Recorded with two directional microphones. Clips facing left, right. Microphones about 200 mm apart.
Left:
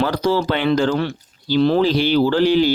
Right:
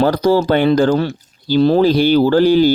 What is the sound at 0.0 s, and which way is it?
Speech, 40° right (ahead or behind).